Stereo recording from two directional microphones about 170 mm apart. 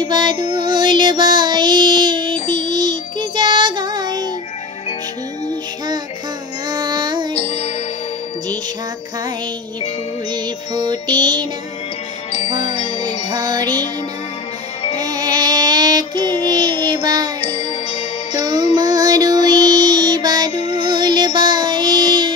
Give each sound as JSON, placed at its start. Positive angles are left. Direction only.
{"t": 0.0, "sound": "child singing", "side_deg": -25}
{"t": 2.5, "sound": "music", "side_deg": -25}
{"t": 6.7, "sound": "child singing", "side_deg": -25}
{"t": 7.3, "sound": "music", "side_deg": 40}
{"t": 10.3, "sound": "music", "side_deg": -25}
{"t": 12.3, "sound": "music", "side_deg": 40}
{"t": 13.3, "sound": "music", "side_deg": -25}
{"t": 15.0, "sound": "child singing", "side_deg": -25}
{"t": 17.0, "sound": "music", "side_deg": -25}
{"t": 18.4, "sound": "music", "side_deg": -20}
{"t": 20.5, "sound": "music", "side_deg": 40}
{"t": 20.8, "sound": "music", "side_deg": -25}